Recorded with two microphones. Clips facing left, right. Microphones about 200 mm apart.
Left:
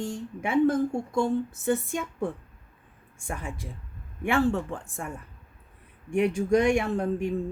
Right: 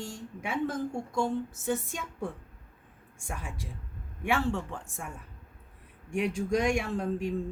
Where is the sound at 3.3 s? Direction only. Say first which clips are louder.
Left 4 dB; 55° left (ahead or behind).